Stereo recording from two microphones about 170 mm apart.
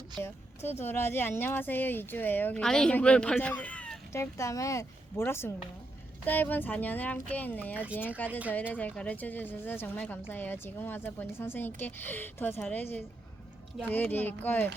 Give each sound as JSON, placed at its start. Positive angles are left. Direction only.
{"t": 0.2, "sound": "a woman's voice", "side_deg": 15}
{"t": 4.1, "sound": "a woman's voice", "side_deg": 15}
{"t": 8.3, "sound": "speech", "side_deg": -10}
{"t": 8.7, "sound": "a woman's voice", "side_deg": 10}